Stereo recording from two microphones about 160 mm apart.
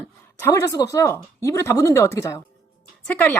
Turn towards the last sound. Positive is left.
turn(degrees=10)  # may be behind; listen again after turning